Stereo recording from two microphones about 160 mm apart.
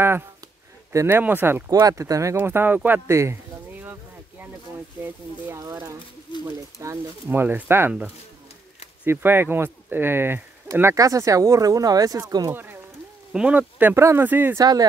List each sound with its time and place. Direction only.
0.9 s speech: 15° right (ahead or behind)
5.0 s speech: 20° right (ahead or behind)
13.3 s speech: 5° right (ahead or behind)
14.6 s speech: 25° right (ahead or behind)